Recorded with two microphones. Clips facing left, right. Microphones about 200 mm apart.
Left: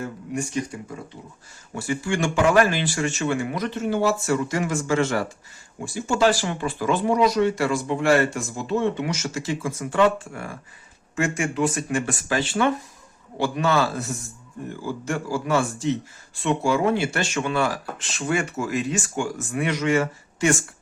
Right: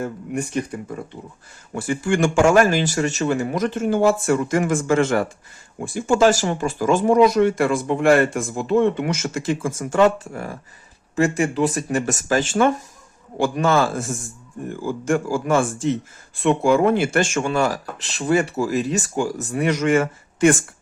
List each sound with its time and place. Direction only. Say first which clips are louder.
0.0 s speech: right 3 dB; 55° right (ahead or behind)